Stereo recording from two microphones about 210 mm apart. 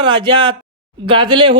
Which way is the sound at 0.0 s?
20° right (ahead or behind).